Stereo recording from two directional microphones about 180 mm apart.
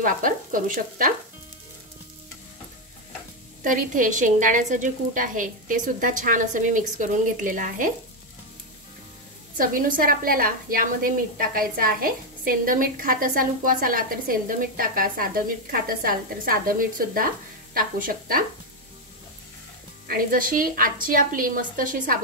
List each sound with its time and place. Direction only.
0.0 s a woman's voice: 50° right (ahead or behind)
3.6 s a woman's voice: 45° right (ahead or behind)
9.6 s a woman's voice: 50° right (ahead or behind)
20.1 s a woman's voice: 50° right (ahead or behind)